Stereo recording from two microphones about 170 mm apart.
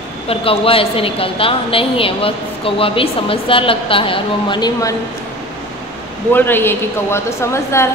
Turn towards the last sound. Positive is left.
turn(degrees=15)  # may be behind; listen again after turning